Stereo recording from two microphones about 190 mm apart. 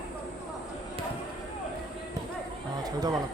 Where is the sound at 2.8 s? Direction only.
20° right (ahead or behind).